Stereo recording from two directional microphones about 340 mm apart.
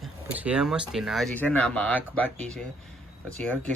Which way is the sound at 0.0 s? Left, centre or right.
Centre.